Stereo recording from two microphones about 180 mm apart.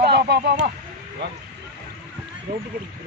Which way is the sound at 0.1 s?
75° right (ahead or behind).